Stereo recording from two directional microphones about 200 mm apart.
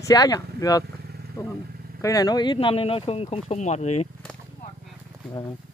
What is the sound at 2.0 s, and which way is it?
Speech, 15° left (ahead or behind).